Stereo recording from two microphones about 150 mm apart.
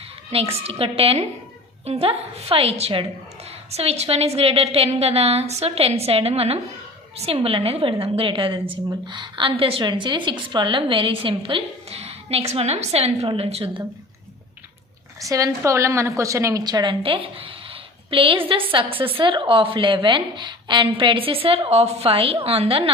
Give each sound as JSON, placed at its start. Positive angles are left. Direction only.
{"t": 0.3, "sound": "a woman's voice", "side_deg": -40}
{"t": 15.2, "sound": "a woman's voice", "side_deg": -20}